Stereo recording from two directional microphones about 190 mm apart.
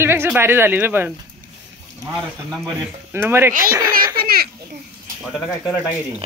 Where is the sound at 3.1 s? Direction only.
10° right (ahead or behind).